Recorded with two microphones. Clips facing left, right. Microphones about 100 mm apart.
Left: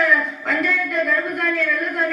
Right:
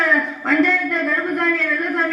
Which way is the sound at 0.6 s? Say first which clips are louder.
Right 3 dB; 30° right (ahead or behind).